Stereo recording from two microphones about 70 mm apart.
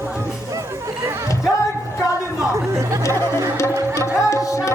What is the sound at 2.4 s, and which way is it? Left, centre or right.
Chatter, right.